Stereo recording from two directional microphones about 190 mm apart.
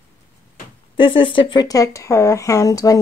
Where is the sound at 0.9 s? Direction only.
25° left (ahead or behind).